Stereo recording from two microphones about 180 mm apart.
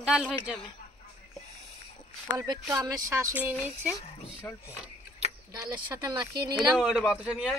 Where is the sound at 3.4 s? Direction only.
10° right (ahead or behind).